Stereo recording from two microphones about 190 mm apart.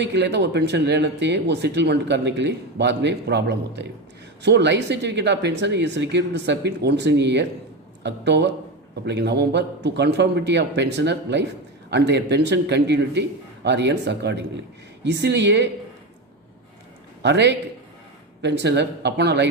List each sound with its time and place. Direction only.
0.0 s speech: 65° right (ahead or behind)
17.2 s speech: 65° right (ahead or behind)